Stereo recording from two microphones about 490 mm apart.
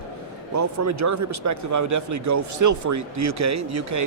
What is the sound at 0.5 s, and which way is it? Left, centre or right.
Speech, right.